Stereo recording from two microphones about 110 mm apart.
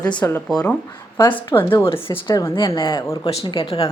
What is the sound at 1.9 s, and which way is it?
Speech, 55° left (ahead or behind).